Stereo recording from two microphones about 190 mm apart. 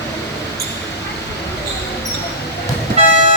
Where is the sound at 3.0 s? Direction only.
30° right (ahead or behind).